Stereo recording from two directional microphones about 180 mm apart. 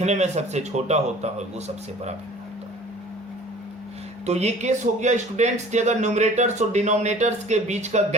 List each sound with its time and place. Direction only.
0.0 s speech: 40° right (ahead or behind)
4.3 s speech: 40° right (ahead or behind)